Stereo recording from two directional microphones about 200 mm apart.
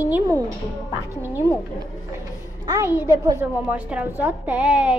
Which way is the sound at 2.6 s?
15° right (ahead or behind).